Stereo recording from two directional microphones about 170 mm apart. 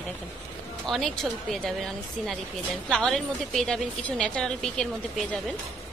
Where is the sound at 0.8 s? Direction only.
Centre (ahead or behind).